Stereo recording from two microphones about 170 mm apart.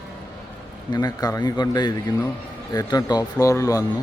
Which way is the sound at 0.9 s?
25° left (ahead or behind).